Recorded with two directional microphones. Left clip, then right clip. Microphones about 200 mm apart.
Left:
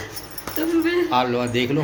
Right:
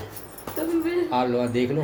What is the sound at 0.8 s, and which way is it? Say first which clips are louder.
Speech: left 4 dB; 5° left (ahead or behind).